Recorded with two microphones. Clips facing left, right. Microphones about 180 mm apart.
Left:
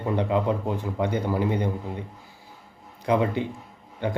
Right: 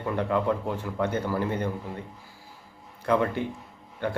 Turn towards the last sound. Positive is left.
turn(degrees=15)  # may be behind; listen again after turning